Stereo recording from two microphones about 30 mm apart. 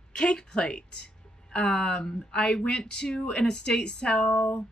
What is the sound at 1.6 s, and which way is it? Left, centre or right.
Speech, left.